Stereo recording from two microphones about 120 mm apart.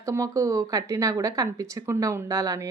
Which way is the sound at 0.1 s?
25° right (ahead or behind).